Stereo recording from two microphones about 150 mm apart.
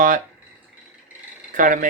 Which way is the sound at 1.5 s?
65° right (ahead or behind).